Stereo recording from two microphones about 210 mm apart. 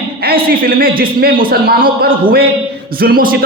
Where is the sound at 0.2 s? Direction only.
45° right (ahead or behind).